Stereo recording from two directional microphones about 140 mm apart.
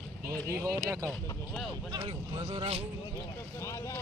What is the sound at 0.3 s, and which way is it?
Speech, 25° right (ahead or behind).